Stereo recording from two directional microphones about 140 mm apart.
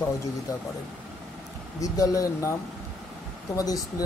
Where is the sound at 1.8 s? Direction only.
25° left (ahead or behind).